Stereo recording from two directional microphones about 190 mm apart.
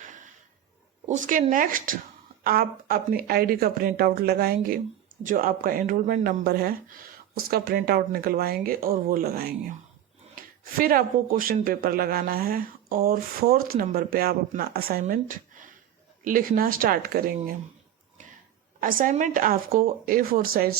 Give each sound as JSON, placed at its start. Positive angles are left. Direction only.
{"t": 0.0, "sound": "a sound", "side_deg": -40}
{"t": 1.0, "sound": "speech", "side_deg": -40}
{"t": 18.8, "sound": "speech", "side_deg": -45}